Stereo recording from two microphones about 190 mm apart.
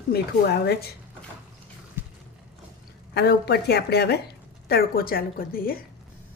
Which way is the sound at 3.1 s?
55° left (ahead or behind).